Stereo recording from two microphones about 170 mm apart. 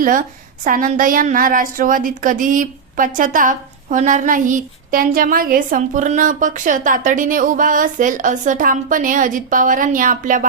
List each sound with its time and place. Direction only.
0.0 s a woman's voice: 50° right (ahead or behind)